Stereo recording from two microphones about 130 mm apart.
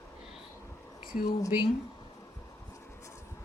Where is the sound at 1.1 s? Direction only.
90° left.